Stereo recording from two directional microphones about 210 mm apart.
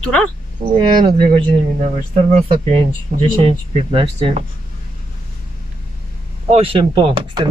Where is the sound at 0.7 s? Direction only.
25° right (ahead or behind).